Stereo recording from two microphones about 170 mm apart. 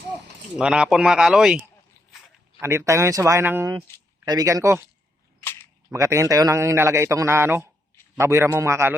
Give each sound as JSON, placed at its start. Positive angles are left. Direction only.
{"t": 0.5, "sound": "speech", "side_deg": -5}
{"t": 2.6, "sound": "a man's voice", "side_deg": -15}
{"t": 5.4, "sound": "single-lens reflex camera", "side_deg": 10}
{"t": 5.9, "sound": "a man's voice", "side_deg": -15}